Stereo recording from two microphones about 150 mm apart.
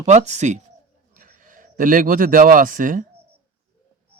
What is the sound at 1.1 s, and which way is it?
A man's voice, 65° right (ahead or behind).